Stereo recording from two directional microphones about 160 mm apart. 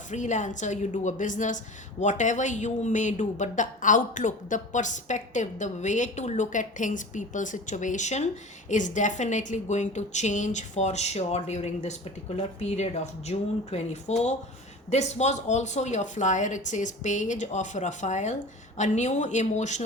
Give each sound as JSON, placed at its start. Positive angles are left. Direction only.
{"t": 0.1, "sound": "a woman's voice", "side_deg": 50}